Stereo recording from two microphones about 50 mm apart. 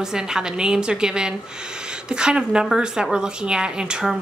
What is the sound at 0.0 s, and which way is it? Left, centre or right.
A woman's voice, centre.